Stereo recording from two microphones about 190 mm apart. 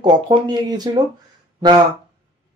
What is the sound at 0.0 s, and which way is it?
Speech, 20° right (ahead or behind).